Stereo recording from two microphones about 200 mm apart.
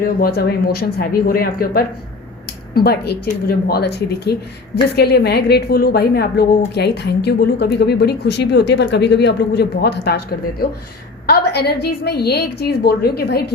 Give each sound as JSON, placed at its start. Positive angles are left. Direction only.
{"t": 0.0, "sound": "a woman's voice", "side_deg": 50}